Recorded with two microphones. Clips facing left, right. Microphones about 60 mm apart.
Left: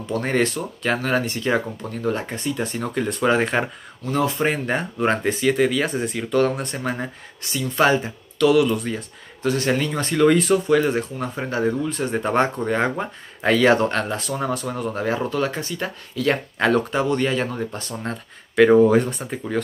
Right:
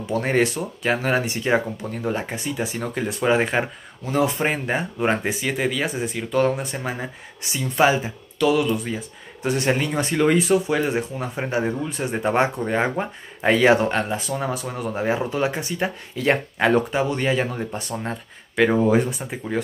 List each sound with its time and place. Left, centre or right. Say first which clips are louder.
0.0 s speech: right 1 dB; centre
9.4 s speech: left 1 dB; centre
16.6 s speech: even; centre